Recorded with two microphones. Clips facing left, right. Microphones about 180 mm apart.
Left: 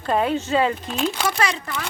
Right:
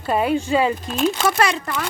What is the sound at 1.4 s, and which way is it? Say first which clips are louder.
Speech: right 4 dB; 60° right (ahead or behind).